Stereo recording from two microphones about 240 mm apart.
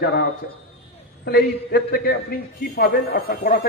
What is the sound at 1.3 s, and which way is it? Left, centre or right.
A man's voice, left.